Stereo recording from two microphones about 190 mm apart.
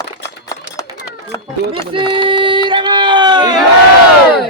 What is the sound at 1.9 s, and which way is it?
Speech, 25° right (ahead or behind).